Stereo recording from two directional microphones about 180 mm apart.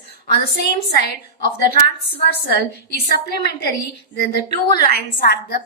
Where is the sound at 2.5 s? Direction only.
60° left (ahead or behind).